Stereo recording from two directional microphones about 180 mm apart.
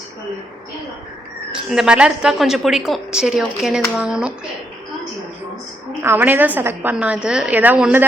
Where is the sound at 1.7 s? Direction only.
5° right (ahead or behind).